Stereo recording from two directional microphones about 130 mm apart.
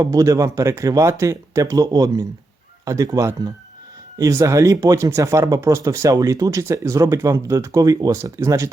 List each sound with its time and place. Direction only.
0.0 s speech: 25° right (ahead or behind)